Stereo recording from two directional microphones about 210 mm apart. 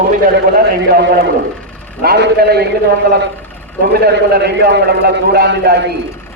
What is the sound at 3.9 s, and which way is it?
A man's voice, 50° right (ahead or behind).